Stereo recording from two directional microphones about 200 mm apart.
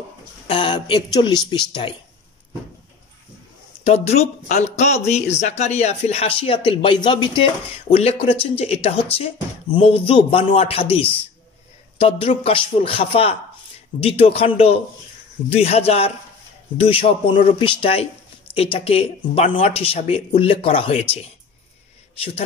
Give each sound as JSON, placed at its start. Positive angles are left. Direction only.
{"t": 0.5, "sound": "speech", "side_deg": 25}
{"t": 3.8, "sound": "a man's voice", "side_deg": 30}